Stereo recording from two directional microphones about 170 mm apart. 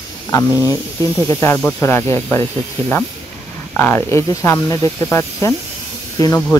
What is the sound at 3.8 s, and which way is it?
Speech, 15° left (ahead or behind).